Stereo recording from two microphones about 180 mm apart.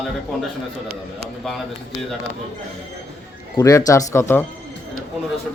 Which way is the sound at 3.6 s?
15° left (ahead or behind).